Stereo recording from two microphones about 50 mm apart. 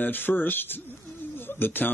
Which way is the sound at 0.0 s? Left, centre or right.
Left.